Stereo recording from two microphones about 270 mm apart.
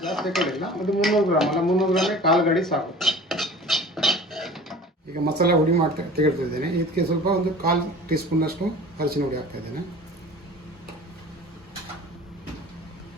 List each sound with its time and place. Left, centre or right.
0.0 s dishes: centre
5.2 s speech: right